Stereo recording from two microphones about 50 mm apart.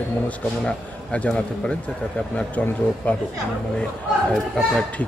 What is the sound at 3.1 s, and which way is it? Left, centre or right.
Speech, left.